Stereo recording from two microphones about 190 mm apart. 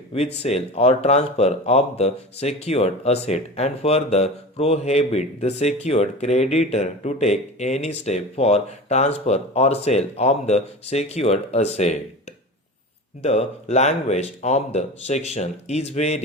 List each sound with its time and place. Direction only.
0.1 s speech: 30° left (ahead or behind)
13.2 s speech: 35° left (ahead or behind)